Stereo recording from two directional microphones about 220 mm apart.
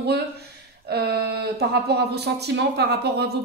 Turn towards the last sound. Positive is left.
turn(degrees=-50)  # may be behind; listen again after turning